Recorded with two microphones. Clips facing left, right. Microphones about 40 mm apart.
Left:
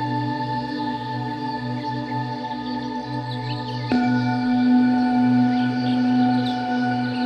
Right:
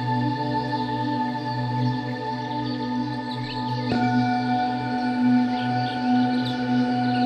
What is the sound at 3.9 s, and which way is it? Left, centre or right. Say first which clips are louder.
Music: left 2 dB; centre.